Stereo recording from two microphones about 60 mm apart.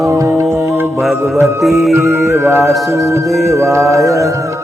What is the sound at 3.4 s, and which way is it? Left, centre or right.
Music, right.